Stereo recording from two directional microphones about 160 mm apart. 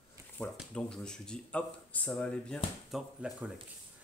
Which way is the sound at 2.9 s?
5° right (ahead or behind).